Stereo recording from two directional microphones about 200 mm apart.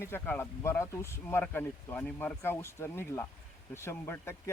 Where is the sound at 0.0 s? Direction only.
10° left (ahead or behind).